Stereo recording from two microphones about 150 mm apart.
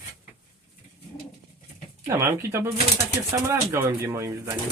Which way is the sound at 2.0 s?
20° right (ahead or behind).